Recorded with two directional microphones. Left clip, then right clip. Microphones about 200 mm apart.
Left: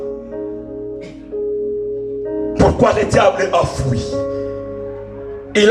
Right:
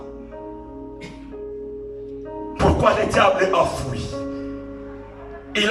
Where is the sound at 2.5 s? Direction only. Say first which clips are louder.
Left 4 dB; 40° left (ahead or behind).